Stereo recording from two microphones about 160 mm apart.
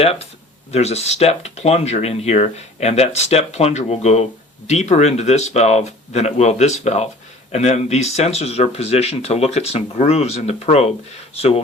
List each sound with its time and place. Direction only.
0.0 s speech: 40° left (ahead or behind)